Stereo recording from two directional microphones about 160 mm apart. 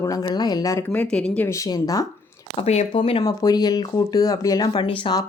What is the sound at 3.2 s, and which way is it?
A woman's voice, 20° left (ahead or behind).